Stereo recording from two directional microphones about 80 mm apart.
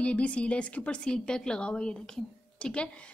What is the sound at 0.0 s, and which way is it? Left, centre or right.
Speech, centre.